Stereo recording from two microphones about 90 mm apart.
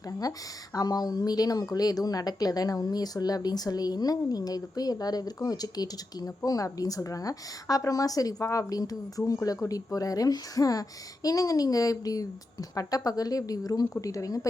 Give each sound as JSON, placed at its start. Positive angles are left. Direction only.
{"t": 0.2, "sound": "a woman's voice", "side_deg": 45}